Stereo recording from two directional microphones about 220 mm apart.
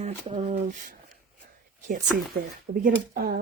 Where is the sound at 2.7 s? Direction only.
40° right (ahead or behind).